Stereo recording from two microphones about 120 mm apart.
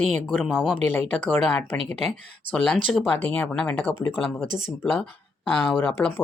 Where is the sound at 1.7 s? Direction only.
55° right (ahead or behind).